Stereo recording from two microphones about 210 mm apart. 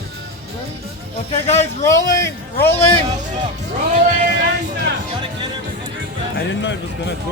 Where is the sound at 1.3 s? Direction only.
30° left (ahead or behind).